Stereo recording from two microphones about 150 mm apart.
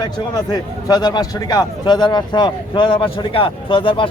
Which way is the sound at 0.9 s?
25° left (ahead or behind).